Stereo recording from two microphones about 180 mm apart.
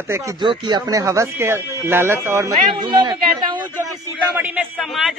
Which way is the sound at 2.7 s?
25° right (ahead or behind).